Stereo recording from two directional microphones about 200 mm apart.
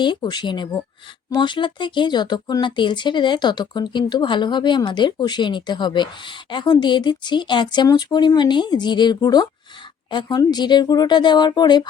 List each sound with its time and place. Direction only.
0.0 s speech: 20° left (ahead or behind)